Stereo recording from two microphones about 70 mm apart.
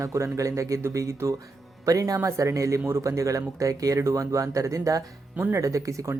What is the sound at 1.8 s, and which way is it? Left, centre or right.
Speech, right.